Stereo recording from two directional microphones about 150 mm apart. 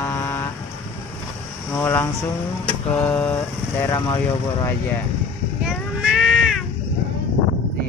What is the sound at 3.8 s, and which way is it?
Speech, 20° left (ahead or behind).